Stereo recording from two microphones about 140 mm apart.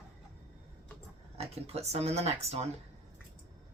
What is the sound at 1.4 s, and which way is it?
Speech, 50° right (ahead or behind).